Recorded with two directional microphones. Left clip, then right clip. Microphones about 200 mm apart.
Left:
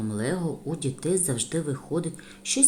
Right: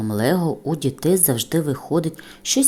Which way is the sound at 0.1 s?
35° right (ahead or behind).